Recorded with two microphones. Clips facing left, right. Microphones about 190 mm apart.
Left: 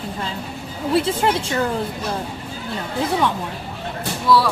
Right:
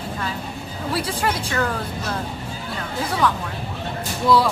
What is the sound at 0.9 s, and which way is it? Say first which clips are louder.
Speech: left 6 dB; 25° left (ahead or behind).